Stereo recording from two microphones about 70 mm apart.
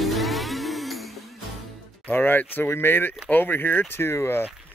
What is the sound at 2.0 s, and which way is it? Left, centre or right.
Speech, left.